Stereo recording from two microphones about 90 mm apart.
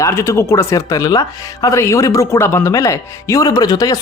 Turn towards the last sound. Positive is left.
turn(degrees=45)  # may be behind; listen again after turning